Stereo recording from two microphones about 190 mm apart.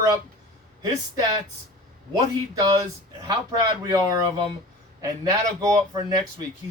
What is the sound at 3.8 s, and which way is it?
Speech, 20° right (ahead or behind).